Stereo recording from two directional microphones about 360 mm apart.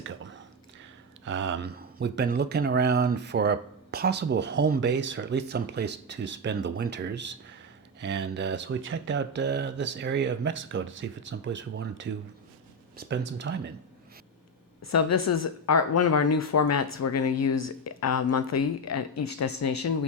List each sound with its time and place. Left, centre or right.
1.2 s speech: right
14.8 s speech: left